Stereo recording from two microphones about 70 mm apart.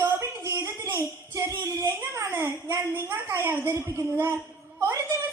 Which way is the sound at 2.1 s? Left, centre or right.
Right.